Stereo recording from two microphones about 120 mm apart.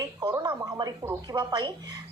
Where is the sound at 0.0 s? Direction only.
35° right (ahead or behind).